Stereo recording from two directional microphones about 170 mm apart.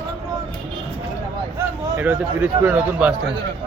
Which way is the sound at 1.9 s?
10° right (ahead or behind).